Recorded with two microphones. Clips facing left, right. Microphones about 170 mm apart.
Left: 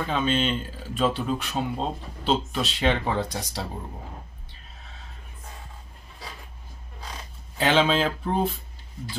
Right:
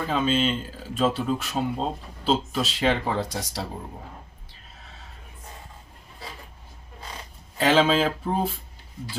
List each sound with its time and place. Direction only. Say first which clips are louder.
0.1 s speech: right 2 dB; centre (ahead or behind)
7.5 s speech: right 2 dB; centre (ahead or behind)